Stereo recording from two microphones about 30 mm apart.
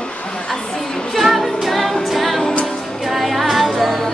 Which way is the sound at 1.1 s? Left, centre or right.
Centre.